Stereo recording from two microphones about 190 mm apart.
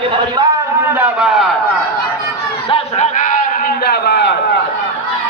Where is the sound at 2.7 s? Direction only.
35° left (ahead or behind); by 4.3 s 65° left (ahead or behind).